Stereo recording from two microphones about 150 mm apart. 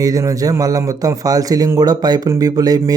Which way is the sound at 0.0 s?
20° right (ahead or behind).